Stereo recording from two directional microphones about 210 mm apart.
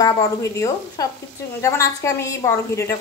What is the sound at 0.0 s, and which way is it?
A woman's voice, 15° left (ahead or behind).